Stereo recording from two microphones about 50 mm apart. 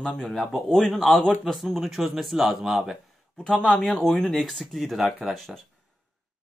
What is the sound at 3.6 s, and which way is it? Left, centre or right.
Speech, centre.